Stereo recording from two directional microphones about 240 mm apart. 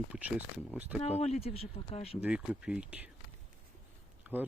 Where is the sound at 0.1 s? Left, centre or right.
Centre.